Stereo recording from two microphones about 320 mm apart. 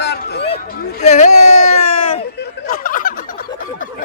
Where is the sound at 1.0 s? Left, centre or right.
Left.